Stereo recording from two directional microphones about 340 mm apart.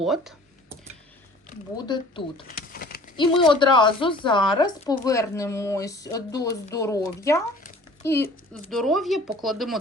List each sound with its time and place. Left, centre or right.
0.0 s computer keyboard: centre
2.5 s a sound: left
3.2 s speech: centre